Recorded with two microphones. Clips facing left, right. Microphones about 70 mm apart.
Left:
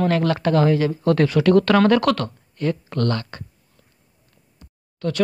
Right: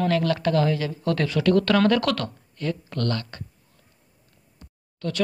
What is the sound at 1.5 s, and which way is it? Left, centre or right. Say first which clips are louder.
Speech: left 3 dB; left.